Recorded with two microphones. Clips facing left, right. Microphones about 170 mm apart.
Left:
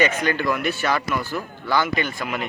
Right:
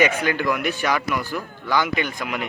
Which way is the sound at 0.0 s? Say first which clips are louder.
Right 1 dB; 10° right (ahead or behind).